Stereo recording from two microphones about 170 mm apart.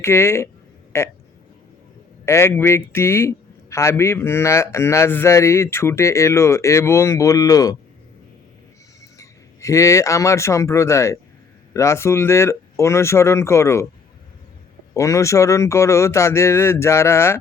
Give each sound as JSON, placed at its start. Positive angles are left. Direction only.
{"t": 0.0, "sound": "a man's voice", "side_deg": 15}
{"t": 2.2, "sound": "a man's voice", "side_deg": 15}
{"t": 9.0, "sound": "a man's voice", "side_deg": 20}
{"t": 14.9, "sound": "a man's voice", "side_deg": 20}